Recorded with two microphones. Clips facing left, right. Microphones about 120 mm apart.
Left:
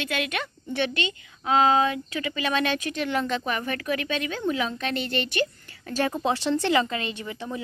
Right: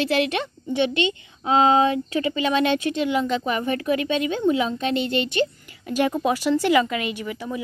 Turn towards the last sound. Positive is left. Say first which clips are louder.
# right 4 dB
turn(degrees=30)  # may be behind; listen again after turning